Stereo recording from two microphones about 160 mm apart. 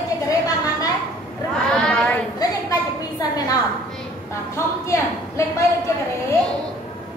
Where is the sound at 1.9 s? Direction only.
10° left (ahead or behind).